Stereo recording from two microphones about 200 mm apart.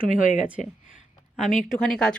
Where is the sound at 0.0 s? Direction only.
40° left (ahead or behind).